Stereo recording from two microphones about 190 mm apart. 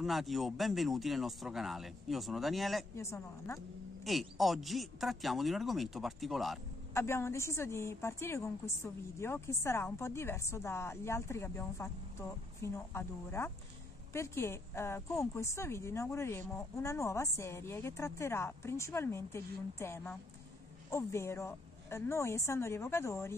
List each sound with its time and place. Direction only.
0.0 s speech: centre (ahead or behind)
3.0 s a woman's voice: 15° left (ahead or behind)
3.5 s speech: centre (ahead or behind)
6.9 s a woman's voice: 15° left (ahead or behind)